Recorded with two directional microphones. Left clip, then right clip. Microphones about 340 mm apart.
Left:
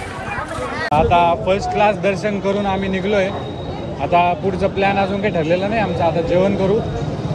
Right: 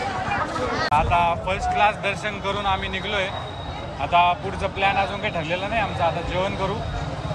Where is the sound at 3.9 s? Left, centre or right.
Right.